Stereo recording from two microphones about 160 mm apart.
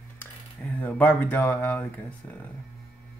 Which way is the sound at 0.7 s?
10° left (ahead or behind).